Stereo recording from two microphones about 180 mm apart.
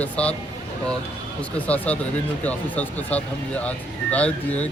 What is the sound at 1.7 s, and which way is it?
Speech, 5° left (ahead or behind).